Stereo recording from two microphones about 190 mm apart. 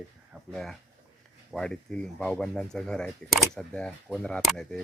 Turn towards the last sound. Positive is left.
turn(degrees=5)  # may be behind; listen again after turning